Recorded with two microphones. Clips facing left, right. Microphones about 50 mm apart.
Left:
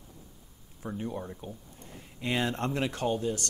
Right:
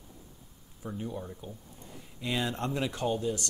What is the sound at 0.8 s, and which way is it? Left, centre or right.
Speech, left.